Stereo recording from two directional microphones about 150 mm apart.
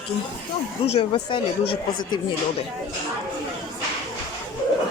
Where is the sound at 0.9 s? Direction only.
35° left (ahead or behind).